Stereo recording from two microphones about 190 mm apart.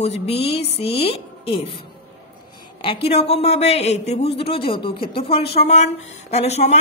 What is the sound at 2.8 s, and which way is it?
A man's voice, 30° left (ahead or behind).